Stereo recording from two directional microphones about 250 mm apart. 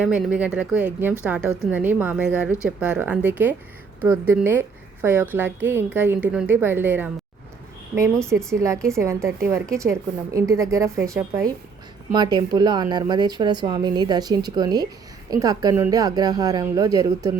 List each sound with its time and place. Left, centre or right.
0.0 s a woman's voice: centre